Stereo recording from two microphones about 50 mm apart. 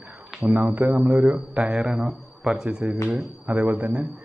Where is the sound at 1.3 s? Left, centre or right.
Right.